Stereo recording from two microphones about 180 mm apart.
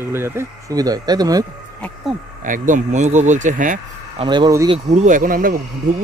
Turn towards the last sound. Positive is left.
turn(degrees=-50)  # may be behind; listen again after turning